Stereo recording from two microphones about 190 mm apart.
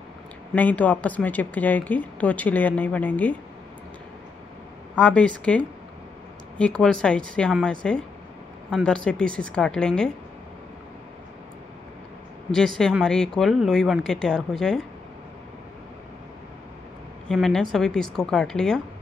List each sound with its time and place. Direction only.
0.6 s speech: 10° left (ahead or behind)
4.9 s speech: 5° left (ahead or behind)
12.4 s speech: 5° left (ahead or behind)
17.3 s speech: centre (ahead or behind)